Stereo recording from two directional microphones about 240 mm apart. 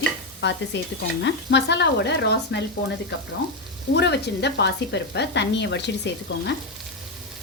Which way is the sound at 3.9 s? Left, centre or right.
Left.